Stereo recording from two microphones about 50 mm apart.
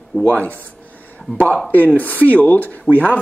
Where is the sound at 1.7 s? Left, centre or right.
Left.